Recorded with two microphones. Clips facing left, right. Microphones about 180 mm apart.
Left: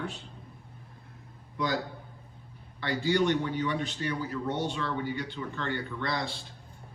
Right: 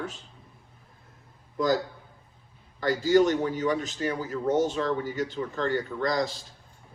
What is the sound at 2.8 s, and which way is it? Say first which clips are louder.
A man's voice: right 6 dB; 40° right (ahead or behind).